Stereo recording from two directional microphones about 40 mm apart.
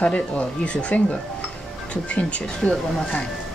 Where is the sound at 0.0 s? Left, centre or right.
Left.